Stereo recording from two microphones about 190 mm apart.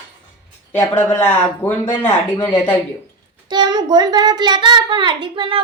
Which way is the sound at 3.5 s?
20° right (ahead or behind).